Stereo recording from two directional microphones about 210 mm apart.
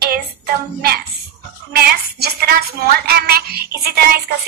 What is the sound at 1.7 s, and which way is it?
A woman's voice, 45° right (ahead or behind).